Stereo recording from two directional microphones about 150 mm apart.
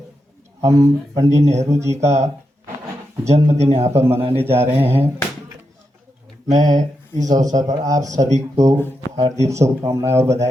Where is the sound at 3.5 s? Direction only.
45° right (ahead or behind).